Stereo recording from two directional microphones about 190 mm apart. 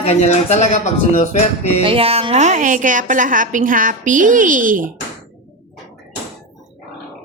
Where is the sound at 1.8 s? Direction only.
30° right (ahead or behind).